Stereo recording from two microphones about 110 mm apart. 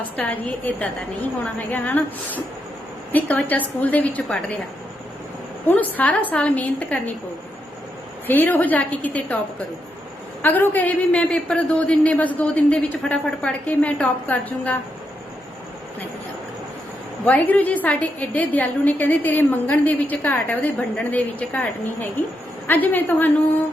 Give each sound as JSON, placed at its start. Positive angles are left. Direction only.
{"t": 0.2, "sound": "a man's voice", "side_deg": 15}
{"t": 5.6, "sound": "a man's voice", "side_deg": 15}
{"t": 8.3, "sound": "a man's voice", "side_deg": 15}
{"t": 10.4, "sound": "a man's voice", "side_deg": 20}
{"t": 17.2, "sound": "a man's voice", "side_deg": 15}